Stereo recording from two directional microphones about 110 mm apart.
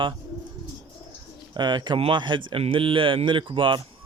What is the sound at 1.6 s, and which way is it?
Speech, 45° right (ahead or behind).